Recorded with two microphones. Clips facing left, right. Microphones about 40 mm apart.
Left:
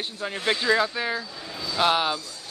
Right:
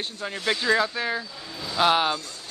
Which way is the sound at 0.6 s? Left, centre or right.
Centre.